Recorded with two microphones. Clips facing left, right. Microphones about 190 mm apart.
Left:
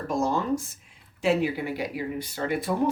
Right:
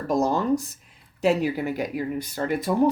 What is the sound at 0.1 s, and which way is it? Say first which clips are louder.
Speech: right 4 dB; 40° right (ahead or behind).